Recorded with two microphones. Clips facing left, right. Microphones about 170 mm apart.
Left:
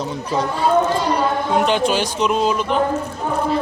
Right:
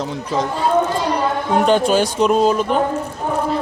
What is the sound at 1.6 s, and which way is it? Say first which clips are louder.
A man's voice: right 3 dB; 45° right (ahead or behind).